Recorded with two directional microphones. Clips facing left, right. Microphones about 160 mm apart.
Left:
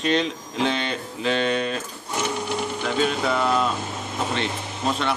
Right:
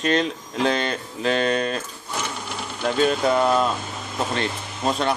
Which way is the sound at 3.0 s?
45° right (ahead or behind).